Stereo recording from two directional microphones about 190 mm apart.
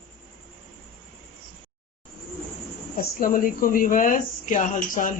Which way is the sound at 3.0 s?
45° left (ahead or behind).